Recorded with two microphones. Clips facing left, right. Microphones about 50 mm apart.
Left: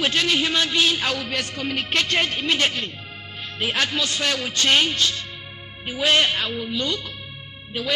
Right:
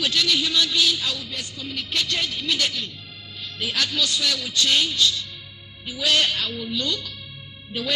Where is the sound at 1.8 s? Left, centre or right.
Left.